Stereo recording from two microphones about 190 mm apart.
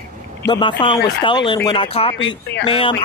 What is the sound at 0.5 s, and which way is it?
Speech, 25° left (ahead or behind).